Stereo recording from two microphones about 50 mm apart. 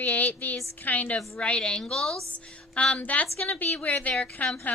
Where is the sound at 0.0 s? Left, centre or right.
Left; by 2.1 s centre.